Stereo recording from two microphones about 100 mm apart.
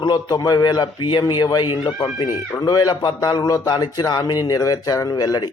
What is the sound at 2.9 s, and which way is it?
A man's voice, 50° left (ahead or behind).